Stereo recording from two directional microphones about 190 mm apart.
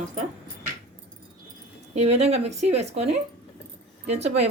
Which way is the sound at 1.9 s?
35° right (ahead or behind).